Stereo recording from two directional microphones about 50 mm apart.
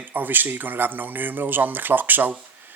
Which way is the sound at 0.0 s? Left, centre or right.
Right.